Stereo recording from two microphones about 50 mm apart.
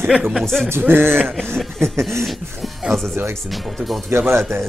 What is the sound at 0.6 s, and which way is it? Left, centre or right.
Speech, right.